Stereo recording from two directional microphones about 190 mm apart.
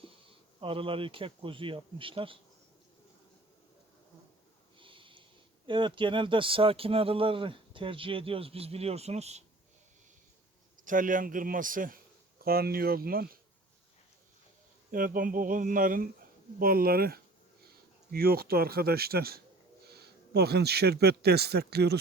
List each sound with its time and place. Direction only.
0.6 s speech: 25° right (ahead or behind)
4.8 s a sound: 25° right (ahead or behind)
5.6 s speech: 25° right (ahead or behind)
10.8 s speech: 45° right (ahead or behind)
14.8 s speech: 50° right (ahead or behind)